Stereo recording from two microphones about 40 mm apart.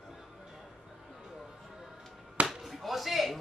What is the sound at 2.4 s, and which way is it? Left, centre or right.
Slap, centre.